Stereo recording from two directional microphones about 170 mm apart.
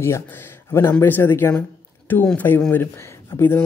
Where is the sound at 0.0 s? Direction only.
15° left (ahead or behind).